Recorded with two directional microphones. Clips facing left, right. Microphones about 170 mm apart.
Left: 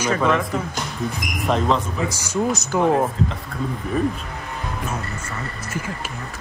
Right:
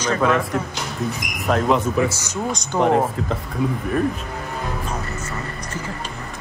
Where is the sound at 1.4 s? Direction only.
5° right (ahead or behind).